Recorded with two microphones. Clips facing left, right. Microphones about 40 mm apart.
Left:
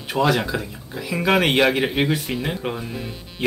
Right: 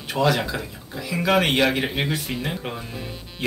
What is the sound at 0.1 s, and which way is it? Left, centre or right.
Speech, centre.